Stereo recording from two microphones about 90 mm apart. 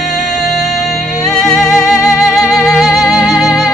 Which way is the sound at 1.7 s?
35° left (ahead or behind).